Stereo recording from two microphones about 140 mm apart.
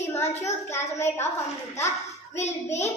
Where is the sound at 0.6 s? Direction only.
20° left (ahead or behind).